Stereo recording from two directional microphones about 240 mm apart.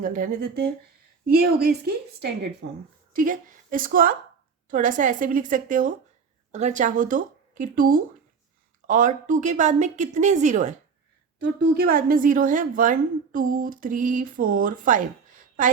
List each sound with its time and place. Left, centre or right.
0.0 s a woman's voice: right
11.3 s a woman's voice: right